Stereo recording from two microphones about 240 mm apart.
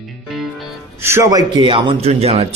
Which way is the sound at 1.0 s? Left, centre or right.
Centre.